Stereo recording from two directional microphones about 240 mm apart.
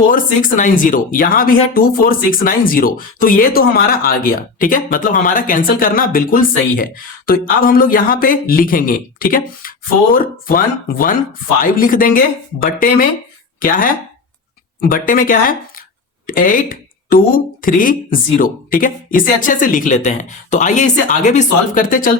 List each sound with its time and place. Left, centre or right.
0.1 s speech: left